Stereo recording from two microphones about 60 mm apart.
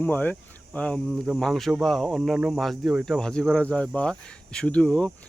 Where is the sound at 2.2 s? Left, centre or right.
Centre.